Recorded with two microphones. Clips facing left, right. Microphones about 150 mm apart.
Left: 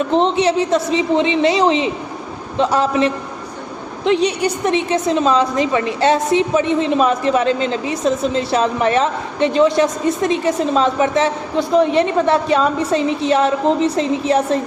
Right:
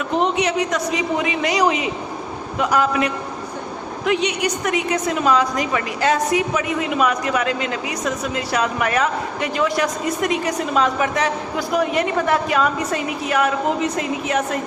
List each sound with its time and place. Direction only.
0.0 s a woman's voice: 30° left (ahead or behind)